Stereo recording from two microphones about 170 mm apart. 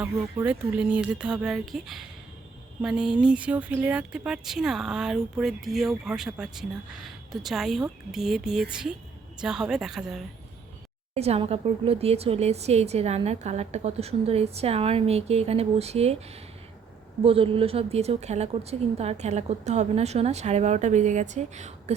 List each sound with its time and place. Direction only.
0.4 s speech: 10° right (ahead or behind)
11.1 s speech: 35° right (ahead or behind)